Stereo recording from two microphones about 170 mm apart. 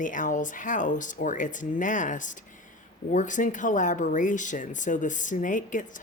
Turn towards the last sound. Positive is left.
turn(degrees=50)  # may be behind; listen again after turning